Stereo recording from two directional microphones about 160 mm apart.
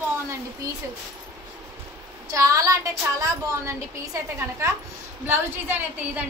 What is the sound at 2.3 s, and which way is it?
A woman's voice, 20° right (ahead or behind).